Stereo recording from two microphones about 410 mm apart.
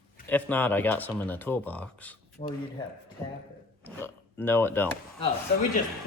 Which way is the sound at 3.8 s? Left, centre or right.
Centre.